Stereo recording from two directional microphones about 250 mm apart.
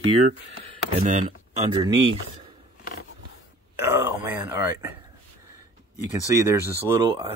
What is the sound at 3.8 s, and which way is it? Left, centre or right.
Speech, centre.